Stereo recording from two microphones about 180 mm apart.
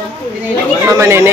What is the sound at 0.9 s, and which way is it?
Speech, 15° right (ahead or behind).